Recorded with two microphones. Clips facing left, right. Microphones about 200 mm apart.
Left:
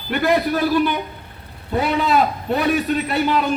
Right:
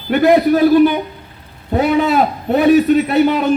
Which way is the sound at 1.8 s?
50° right (ahead or behind).